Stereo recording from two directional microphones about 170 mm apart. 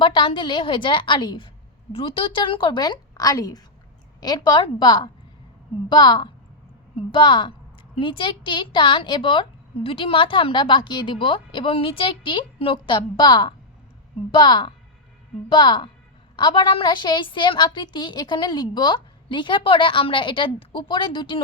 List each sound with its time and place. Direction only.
0.0 s a woman's voice: 30° left (ahead or behind)